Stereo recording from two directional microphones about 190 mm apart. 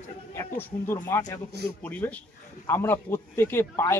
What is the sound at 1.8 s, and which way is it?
A man's voice, 10° left (ahead or behind).